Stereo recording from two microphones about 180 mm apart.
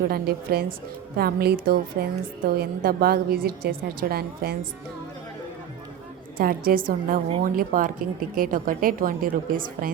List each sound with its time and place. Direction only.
0.1 s a woman's voice: 55° right (ahead or behind)
6.3 s a woman's voice: 55° right (ahead or behind)